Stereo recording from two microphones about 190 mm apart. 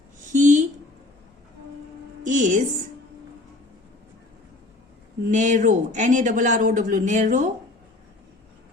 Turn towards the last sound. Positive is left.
turn(degrees=-40)  # may be behind; listen again after turning